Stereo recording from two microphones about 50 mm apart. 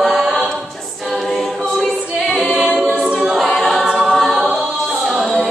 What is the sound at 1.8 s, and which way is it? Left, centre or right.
A capella, centre.